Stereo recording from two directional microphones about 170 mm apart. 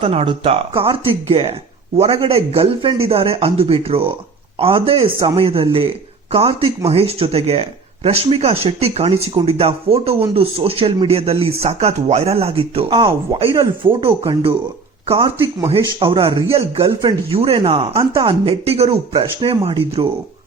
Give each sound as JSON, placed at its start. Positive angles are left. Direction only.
{"t": 0.0, "sound": "speech", "side_deg": -35}
{"t": 15.0, "sound": "speech", "side_deg": -35}